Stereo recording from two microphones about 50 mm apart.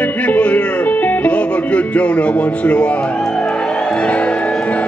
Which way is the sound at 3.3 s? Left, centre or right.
Centre.